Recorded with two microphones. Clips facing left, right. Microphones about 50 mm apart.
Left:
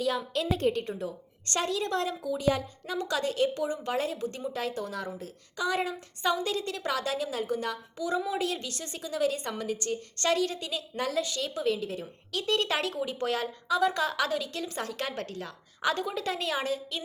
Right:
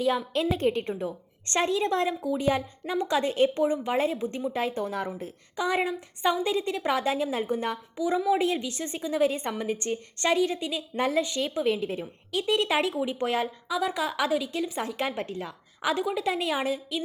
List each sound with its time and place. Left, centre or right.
0.0 s a woman's voice: right
13.7 s a woman's voice: centre